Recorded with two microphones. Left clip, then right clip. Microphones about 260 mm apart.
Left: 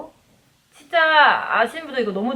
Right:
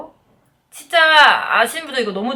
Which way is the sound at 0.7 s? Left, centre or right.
Centre.